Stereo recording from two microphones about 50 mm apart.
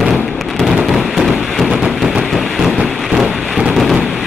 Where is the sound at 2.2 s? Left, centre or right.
Centre.